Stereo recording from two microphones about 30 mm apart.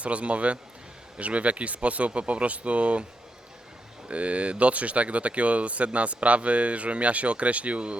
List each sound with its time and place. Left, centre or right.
0.0 s speech: right
4.1 s speech: right